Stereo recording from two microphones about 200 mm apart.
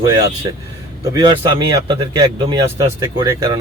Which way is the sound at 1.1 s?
25° right (ahead or behind).